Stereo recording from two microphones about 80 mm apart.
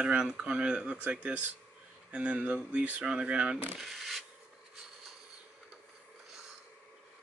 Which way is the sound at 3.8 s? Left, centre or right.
Centre.